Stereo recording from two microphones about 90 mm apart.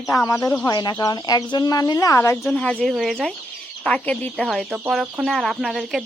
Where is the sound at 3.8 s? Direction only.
15° left (ahead or behind).